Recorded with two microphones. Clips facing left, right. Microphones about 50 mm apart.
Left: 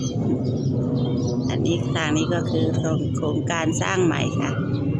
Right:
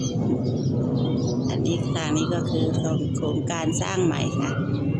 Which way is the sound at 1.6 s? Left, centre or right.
Left.